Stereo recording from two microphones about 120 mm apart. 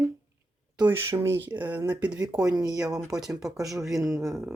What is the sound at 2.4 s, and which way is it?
Speech, 30° right (ahead or behind).